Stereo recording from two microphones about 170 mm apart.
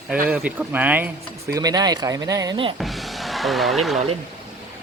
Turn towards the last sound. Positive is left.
turn(degrees=0)  # may be behind; listen again after turning